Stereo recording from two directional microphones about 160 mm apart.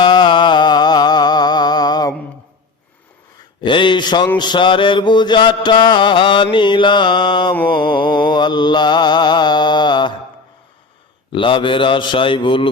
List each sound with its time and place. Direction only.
0.0 s music: 30° left (ahead or behind)
3.6 s mantra: 30° left (ahead or behind)
11.3 s a man's voice: 30° left (ahead or behind)